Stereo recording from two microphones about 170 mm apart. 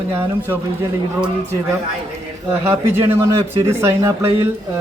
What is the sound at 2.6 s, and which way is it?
Speech, 15° right (ahead or behind).